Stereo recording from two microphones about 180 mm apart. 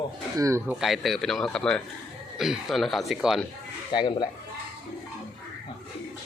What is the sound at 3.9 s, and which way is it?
Speech, 25° left (ahead or behind).